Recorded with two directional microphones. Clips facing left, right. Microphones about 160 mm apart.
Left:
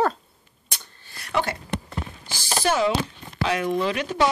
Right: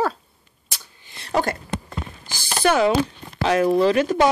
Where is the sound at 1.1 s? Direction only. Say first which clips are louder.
Right 1 dB; 25° right (ahead or behind).